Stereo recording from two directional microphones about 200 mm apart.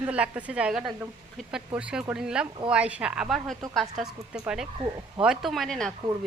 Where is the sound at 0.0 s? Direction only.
5° right (ahead or behind).